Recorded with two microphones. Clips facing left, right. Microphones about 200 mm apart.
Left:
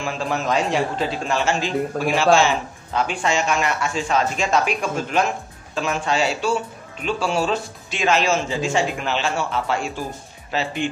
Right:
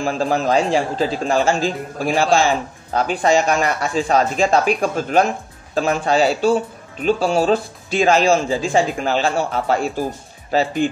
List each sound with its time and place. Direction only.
0.0 s speech: 35° right (ahead or behind)